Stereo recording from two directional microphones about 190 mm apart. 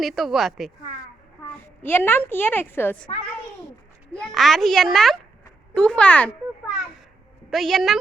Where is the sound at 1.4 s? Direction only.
10° left (ahead or behind).